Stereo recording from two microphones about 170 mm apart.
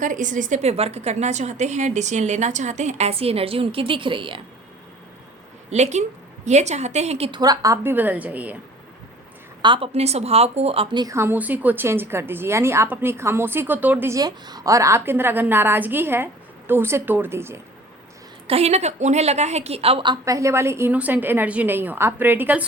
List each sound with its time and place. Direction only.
0.0 s a woman's voice: 50° right (ahead or behind); by 4.4 s 30° right (ahead or behind)
5.7 s a woman's voice: 40° right (ahead or behind); by 8.5 s 10° right (ahead or behind)
9.6 s a woman's voice: 30° right (ahead or behind)
11.0 s a woman's voice: 15° right (ahead or behind)
18.4 s a woman's voice: 35° right (ahead or behind); by 22.6 s 10° right (ahead or behind)